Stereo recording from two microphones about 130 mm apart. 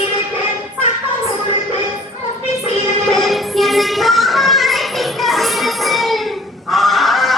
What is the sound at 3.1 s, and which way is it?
Child singing, centre (ahead or behind).